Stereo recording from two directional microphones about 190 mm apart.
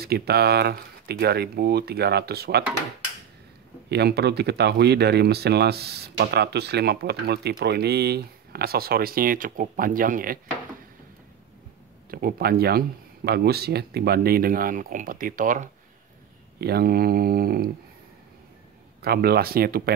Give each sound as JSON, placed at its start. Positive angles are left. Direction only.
{"t": 0.0, "sound": "speech", "side_deg": -55}
{"t": 3.9, "sound": "speech", "side_deg": -60}
{"t": 12.1, "sound": "speech", "side_deg": -50}
{"t": 16.5, "sound": "speech", "side_deg": -55}
{"t": 18.9, "sound": "speech", "side_deg": -55}